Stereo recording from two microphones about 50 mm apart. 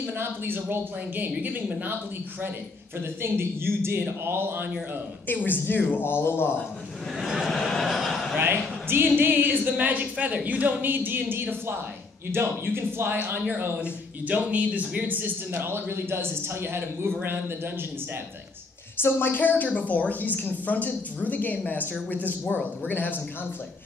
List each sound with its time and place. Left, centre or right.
0.2 s a man's voice: right
3.2 s a man's voice: right
5.3 s speech: left
7.2 s a man's voice: centre
8.4 s speech: right
9.1 s a woman's voice: right
13.7 s a woman's voice: right
15.6 s a man's voice: right
18.9 s a woman's voice: left